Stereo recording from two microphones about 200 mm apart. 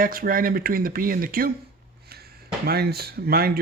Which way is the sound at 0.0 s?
45° right (ahead or behind).